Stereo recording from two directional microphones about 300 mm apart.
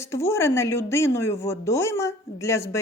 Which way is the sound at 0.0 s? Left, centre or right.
Centre.